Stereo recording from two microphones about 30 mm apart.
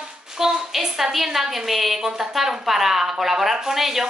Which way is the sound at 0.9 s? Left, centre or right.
Centre.